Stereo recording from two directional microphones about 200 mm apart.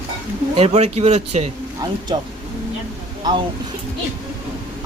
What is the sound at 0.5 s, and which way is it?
Speech, 30° right (ahead or behind).